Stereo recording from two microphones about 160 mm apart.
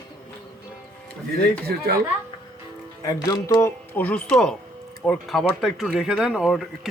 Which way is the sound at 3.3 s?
15° left (ahead or behind).